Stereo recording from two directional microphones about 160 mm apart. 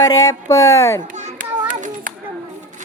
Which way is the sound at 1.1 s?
50° right (ahead or behind).